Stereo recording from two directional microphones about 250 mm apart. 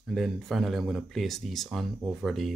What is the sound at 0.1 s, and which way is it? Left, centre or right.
Speech, centre.